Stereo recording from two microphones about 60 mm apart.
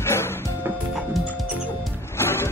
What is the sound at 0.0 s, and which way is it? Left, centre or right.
Music, left.